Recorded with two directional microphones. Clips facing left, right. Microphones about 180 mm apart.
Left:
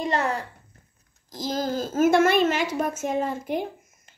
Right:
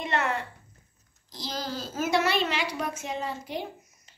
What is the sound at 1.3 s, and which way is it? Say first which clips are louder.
A woman's voice: left 7 dB; 45° left (ahead or behind).